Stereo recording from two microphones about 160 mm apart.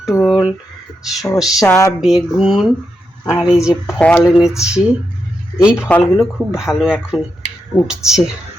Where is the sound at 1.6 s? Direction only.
15° left (ahead or behind).